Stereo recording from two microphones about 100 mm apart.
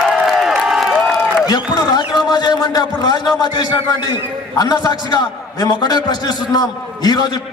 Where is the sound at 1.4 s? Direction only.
40° left (ahead or behind).